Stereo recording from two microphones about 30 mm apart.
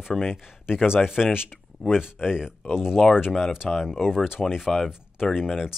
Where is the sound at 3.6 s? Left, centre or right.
Centre.